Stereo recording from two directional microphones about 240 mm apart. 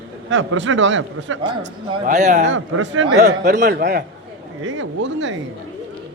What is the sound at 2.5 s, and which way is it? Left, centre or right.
A man's voice, right.